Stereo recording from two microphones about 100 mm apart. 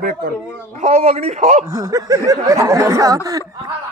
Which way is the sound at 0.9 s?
90° right.